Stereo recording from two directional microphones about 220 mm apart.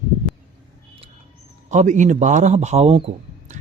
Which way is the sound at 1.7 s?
35° right (ahead or behind).